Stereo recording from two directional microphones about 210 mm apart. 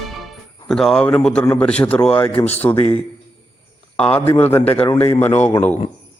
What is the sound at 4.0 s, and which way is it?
A man's voice, 5° left (ahead or behind).